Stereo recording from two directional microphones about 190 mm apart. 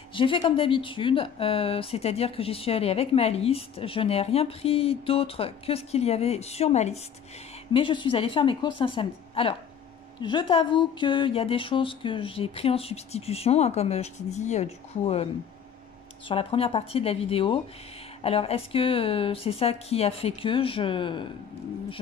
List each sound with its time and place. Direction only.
0.1 s a woman's voice: 25° left (ahead or behind)
16.3 s a woman's voice: 30° left (ahead or behind)